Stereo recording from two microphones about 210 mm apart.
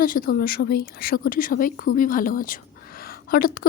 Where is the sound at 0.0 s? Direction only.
40° left (ahead or behind).